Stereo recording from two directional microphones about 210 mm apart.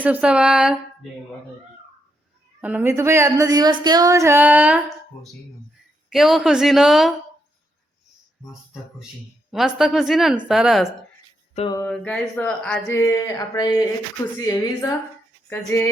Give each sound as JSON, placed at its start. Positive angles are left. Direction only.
{"t": 0.0, "sound": "speech", "side_deg": -5}
{"t": 2.6, "sound": "speech", "side_deg": -10}
{"t": 6.1, "sound": "speech", "side_deg": 0}
{"t": 9.5, "sound": "speech", "side_deg": 0}
{"t": 11.5, "sound": "mantra", "side_deg": 25}
{"t": 11.8, "sound": "speech", "side_deg": 5}